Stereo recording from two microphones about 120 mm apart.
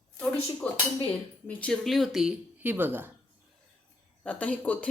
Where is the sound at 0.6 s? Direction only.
10° left (ahead or behind).